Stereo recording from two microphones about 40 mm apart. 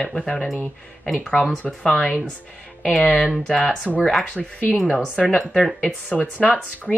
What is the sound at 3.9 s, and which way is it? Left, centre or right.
Speech, right.